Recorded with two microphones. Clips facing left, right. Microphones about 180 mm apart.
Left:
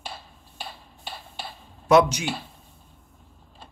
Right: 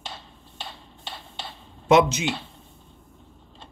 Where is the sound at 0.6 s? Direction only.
5° left (ahead or behind).